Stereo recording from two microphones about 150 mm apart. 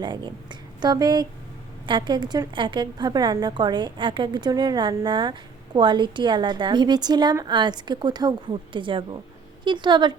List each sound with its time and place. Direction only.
0.0 s a woman's voice: 30° right (ahead or behind)